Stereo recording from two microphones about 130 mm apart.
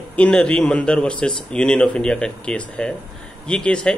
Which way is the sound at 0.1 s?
10° left (ahead or behind).